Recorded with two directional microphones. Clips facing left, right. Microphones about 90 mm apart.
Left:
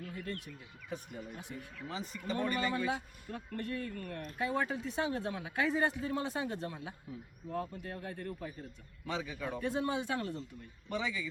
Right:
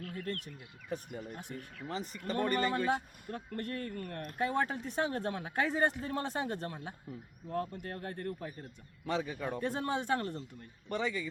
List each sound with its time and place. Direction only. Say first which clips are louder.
0.0 s speech: right 2 dB; 45° right (ahead or behind)